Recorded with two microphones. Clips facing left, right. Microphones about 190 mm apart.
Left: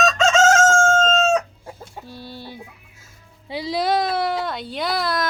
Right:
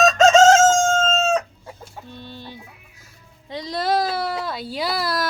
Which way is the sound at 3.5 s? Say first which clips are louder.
Left 1 dB; 5° left (ahead or behind).